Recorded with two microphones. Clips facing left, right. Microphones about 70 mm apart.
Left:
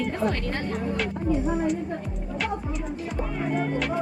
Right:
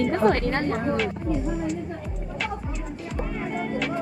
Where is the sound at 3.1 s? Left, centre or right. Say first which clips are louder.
Left 1 dB; centre.